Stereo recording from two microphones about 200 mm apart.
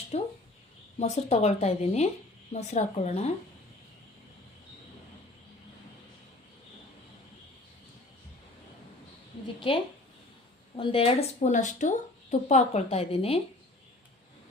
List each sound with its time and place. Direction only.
0.1 s a sound: 30° left (ahead or behind)
0.9 s speech: 35° left (ahead or behind)
9.6 s a woman's voice: 25° left (ahead or behind)